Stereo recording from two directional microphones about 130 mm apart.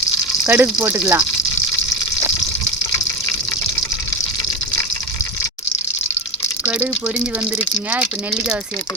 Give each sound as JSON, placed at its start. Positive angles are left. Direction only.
{"t": 0.4, "sound": "speech", "side_deg": -15}
{"t": 7.9, "sound": "speech", "side_deg": -5}